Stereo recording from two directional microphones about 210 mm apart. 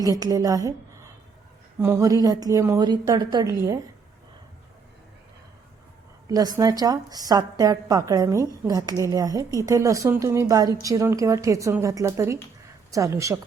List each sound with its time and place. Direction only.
0.0 s a woman's voice: 15° right (ahead or behind)
1.8 s a woman's voice: 15° right (ahead or behind)
6.2 s a woman's voice: 15° right (ahead or behind)